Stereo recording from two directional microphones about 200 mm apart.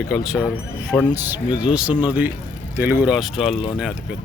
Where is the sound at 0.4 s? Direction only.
5° left (ahead or behind).